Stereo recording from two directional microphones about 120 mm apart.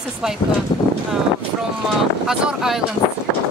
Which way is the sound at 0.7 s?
35° left (ahead or behind).